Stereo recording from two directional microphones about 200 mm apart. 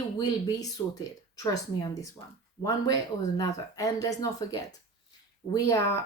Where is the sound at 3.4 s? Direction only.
15° left (ahead or behind).